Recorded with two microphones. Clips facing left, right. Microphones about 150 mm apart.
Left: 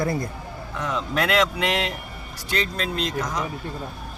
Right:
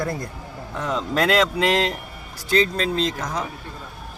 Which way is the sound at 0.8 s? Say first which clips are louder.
Right 3 dB; 30° right (ahead or behind).